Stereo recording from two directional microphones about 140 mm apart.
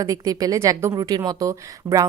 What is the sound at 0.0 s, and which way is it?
A woman's voice, 25° right (ahead or behind).